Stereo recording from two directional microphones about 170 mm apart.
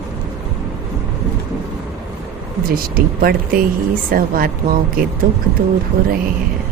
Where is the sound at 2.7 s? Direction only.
60° right (ahead or behind).